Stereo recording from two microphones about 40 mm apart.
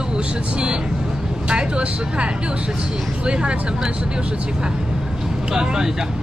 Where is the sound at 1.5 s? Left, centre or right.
Right.